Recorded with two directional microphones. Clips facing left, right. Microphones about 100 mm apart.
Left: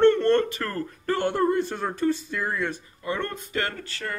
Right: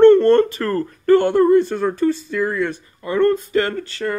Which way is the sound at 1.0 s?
75° right (ahead or behind).